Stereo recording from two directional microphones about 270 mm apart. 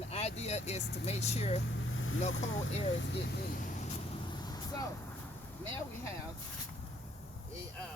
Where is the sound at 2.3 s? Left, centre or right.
Left.